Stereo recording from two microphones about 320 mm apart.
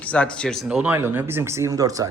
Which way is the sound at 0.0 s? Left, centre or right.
Centre.